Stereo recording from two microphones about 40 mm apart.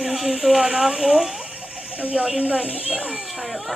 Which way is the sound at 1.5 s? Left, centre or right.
Right.